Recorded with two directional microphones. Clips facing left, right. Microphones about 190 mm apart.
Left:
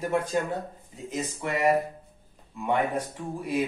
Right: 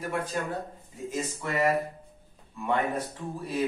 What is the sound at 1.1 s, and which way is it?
Speech, 15° left (ahead or behind).